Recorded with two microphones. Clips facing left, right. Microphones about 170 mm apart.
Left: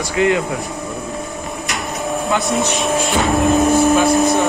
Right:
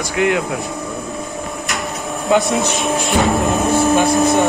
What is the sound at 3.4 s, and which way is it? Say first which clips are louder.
Speech: left 3 dB; 20° left (ahead or behind).